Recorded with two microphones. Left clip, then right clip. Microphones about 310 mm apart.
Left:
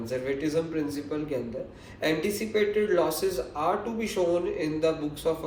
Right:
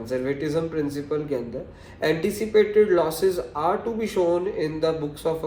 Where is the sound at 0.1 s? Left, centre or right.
Right.